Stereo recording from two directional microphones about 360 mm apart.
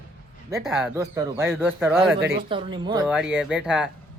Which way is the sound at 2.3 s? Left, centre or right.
Centre.